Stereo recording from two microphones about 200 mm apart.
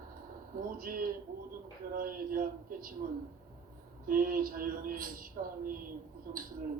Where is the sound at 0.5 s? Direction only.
45° right (ahead or behind).